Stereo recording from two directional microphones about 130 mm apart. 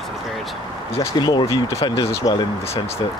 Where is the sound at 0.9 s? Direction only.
35° left (ahead or behind).